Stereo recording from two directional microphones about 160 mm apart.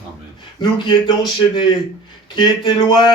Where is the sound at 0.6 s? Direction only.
25° left (ahead or behind).